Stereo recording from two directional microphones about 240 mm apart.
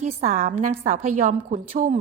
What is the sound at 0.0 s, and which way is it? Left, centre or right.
A woman's voice, right.